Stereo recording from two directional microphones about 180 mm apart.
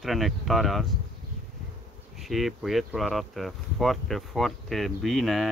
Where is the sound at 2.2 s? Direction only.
Centre (ahead or behind).